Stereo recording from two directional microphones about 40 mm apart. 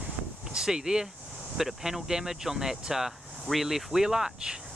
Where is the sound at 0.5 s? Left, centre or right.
Centre.